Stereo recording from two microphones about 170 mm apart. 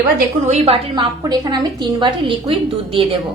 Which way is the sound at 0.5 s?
35° right (ahead or behind).